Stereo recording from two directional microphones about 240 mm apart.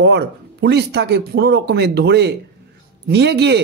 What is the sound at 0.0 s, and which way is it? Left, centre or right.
Speech, right.